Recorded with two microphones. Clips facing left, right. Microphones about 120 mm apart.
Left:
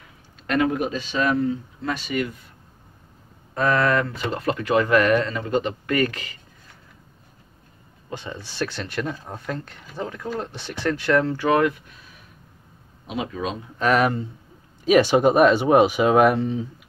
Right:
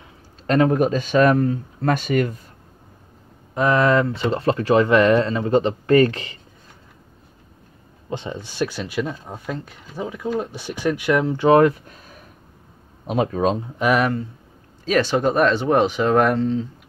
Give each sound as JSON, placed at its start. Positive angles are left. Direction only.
{"t": 0.5, "sound": "speech", "side_deg": -40}
{"t": 3.5, "sound": "speech", "side_deg": -20}
{"t": 8.1, "sound": "speech", "side_deg": -20}
{"t": 11.4, "sound": "speech", "side_deg": -35}
{"t": 13.7, "sound": "speech", "side_deg": -10}
{"t": 14.9, "sound": "speech", "side_deg": 15}